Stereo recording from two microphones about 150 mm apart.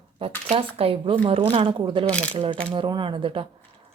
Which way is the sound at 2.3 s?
35° right (ahead or behind).